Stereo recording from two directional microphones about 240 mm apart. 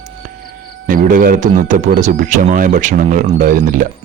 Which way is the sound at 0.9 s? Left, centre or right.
Right.